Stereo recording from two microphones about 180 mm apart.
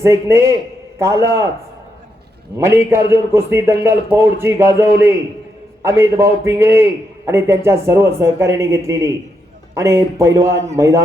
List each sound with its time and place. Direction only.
0.0 s speech: 15° right (ahead or behind)
2.6 s speech: 15° right (ahead or behind)